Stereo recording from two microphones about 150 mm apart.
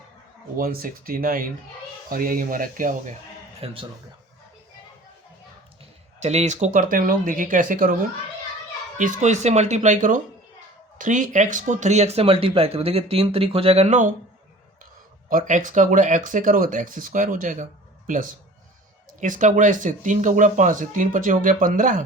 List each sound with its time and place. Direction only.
0.5 s speech: 70° right (ahead or behind)
3.6 s speech: 40° right (ahead or behind)
6.1 s speech: 50° right (ahead or behind)
9.0 s speech: 55° right (ahead or behind)
15.3 s speech: 60° right (ahead or behind)